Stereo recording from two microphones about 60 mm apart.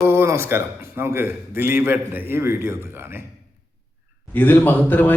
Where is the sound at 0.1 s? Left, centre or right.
Right.